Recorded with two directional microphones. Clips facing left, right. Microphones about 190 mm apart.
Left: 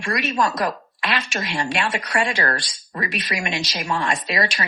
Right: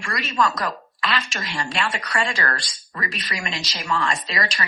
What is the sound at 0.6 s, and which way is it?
Speech, 20° left (ahead or behind).